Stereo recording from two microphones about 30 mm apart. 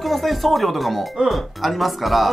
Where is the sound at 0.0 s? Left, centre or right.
Centre.